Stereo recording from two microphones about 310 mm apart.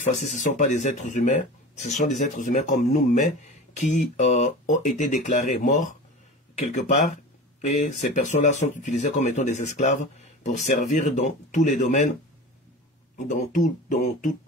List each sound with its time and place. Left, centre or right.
0.0 s speech: left
13.3 s speech: left